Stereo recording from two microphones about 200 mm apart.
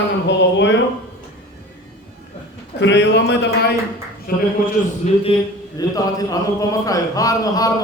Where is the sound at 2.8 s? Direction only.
60° left (ahead or behind).